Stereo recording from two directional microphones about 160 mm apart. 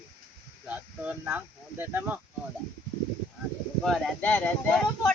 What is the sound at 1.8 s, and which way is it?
Speech, 10° right (ahead or behind).